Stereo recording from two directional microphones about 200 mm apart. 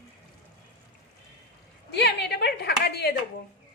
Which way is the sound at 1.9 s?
55° left (ahead or behind).